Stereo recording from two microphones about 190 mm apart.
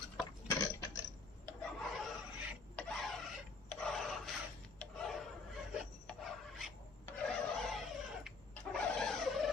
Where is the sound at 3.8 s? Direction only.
Centre (ahead or behind).